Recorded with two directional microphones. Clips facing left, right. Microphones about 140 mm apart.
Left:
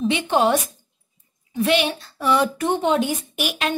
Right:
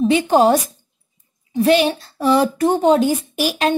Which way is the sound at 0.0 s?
40° right (ahead or behind).